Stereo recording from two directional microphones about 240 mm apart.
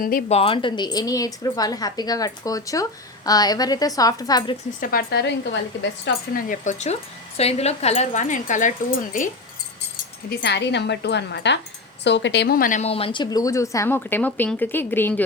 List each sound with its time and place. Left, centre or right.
0.0 s speech: left; by 4.5 s centre
4.8 s speech: left
6.1 s speech: left
10.2 s speech: left; by 15.2 s centre